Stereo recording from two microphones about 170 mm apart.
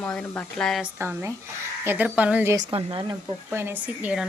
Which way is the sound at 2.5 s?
30° right (ahead or behind).